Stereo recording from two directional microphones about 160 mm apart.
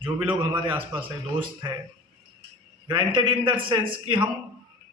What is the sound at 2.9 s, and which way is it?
A man's voice, 30° right (ahead or behind).